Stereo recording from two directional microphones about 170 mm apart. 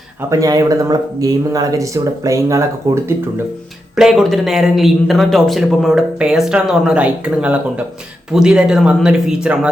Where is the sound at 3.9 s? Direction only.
Centre (ahead or behind).